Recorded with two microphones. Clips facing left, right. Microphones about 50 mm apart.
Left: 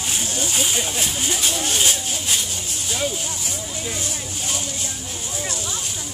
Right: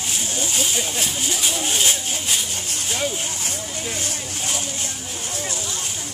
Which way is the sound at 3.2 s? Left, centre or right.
Right.